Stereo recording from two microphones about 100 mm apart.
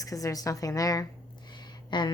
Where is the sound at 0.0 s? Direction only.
35° left (ahead or behind).